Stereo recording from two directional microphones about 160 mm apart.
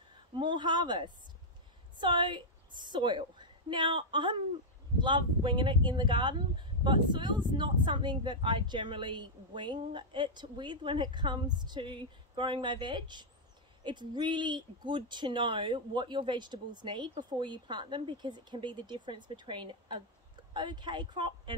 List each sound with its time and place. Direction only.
0.4 s a woman's voice: 30° right (ahead or behind)